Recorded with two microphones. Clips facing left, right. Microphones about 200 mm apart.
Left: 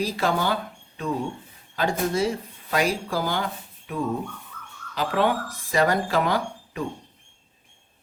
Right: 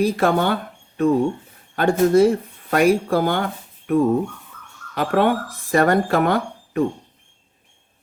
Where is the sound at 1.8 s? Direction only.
55° right (ahead or behind).